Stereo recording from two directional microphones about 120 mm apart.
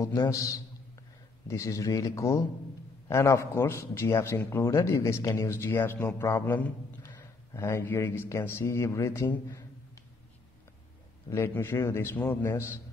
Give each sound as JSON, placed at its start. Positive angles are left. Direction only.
{"t": 0.0, "sound": "speech", "side_deg": 25}
{"t": 11.2, "sound": "speech", "side_deg": 20}